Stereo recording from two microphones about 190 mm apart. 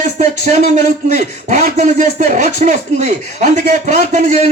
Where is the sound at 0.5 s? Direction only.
40° right (ahead or behind).